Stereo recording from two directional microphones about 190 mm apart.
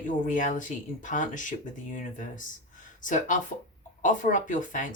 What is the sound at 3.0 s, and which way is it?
Speech, 40° left (ahead or behind).